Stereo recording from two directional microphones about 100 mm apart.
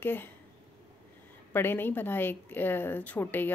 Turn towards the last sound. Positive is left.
turn(degrees=20)  # may be behind; listen again after turning